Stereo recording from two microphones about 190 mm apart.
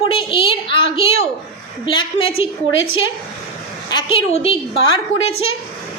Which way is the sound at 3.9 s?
25° left (ahead or behind).